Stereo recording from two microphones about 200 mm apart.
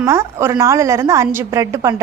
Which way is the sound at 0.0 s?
15° right (ahead or behind).